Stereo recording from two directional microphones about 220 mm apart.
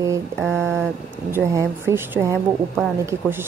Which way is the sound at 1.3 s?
10° right (ahead or behind).